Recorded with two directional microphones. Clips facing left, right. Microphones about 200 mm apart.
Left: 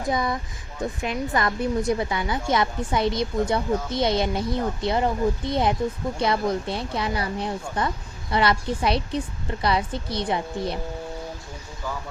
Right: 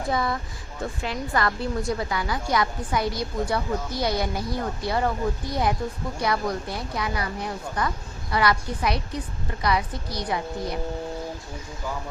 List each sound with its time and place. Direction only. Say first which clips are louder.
0.1 s speech: left 1 dB; 20° left (ahead or behind)